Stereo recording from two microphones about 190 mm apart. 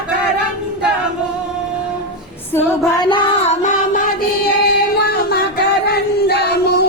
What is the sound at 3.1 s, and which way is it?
Music, 35° left (ahead or behind).